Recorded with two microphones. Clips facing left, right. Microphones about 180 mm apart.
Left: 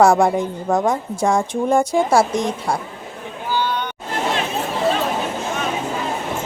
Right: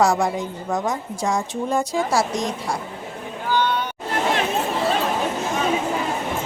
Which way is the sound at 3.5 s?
5° left (ahead or behind).